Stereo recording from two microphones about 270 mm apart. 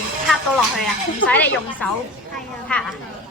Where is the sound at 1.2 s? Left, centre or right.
Centre.